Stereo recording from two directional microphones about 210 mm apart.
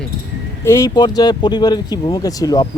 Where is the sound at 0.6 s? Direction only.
15° left (ahead or behind).